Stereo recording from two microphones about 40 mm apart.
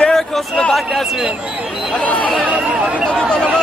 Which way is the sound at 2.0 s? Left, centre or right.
Left.